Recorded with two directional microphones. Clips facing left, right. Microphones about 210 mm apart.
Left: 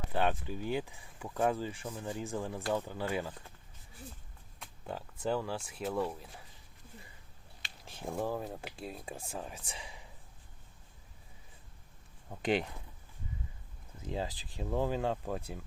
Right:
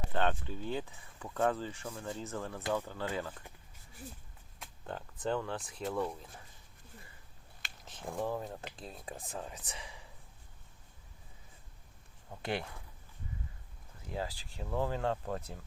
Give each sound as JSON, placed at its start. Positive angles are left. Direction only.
{"t": 0.1, "sound": "speech", "side_deg": 15}
{"t": 4.6, "sound": "a sound", "side_deg": 5}
{"t": 5.2, "sound": "speech", "side_deg": 5}
{"t": 7.9, "sound": "speech", "side_deg": 15}
{"t": 12.4, "sound": "speech", "side_deg": 20}
{"t": 14.0, "sound": "speech", "side_deg": 20}